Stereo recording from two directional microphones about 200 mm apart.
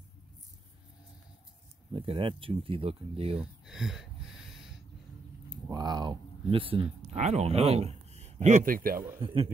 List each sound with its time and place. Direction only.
2.0 s speech: 25° right (ahead or behind)
3.3 s speech: 5° right (ahead or behind)
5.5 s speech: 20° right (ahead or behind); by 9.0 s 45° right (ahead or behind)
9.2 s speech: 25° right (ahead or behind)